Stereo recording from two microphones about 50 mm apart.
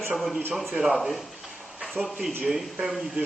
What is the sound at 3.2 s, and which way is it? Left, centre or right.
Speech, right.